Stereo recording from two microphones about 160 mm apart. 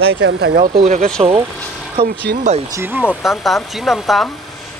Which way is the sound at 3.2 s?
Centre (ahead or behind).